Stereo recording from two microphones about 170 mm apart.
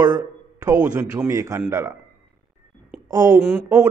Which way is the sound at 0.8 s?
15° right (ahead or behind).